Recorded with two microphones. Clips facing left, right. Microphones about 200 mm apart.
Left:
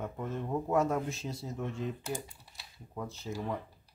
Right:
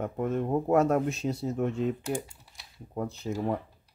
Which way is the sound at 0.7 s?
65° right (ahead or behind).